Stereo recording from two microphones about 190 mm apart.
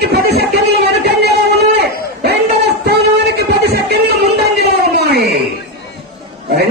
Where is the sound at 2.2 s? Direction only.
60° right (ahead or behind).